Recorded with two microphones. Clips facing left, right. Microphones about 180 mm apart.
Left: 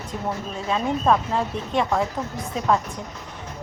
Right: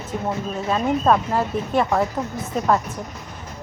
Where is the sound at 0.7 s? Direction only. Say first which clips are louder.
Right 2 dB; 5° right (ahead or behind).